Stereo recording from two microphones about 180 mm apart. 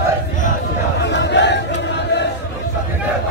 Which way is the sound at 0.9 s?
75° left (ahead or behind).